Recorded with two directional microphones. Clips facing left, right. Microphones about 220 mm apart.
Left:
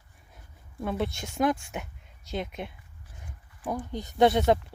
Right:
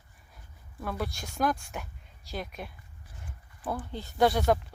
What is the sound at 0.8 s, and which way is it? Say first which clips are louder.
Speech: left 4 dB; 25° left (ahead or behind).